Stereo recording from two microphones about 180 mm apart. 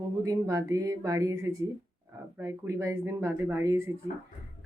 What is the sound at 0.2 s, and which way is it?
Speech, 20° right (ahead or behind).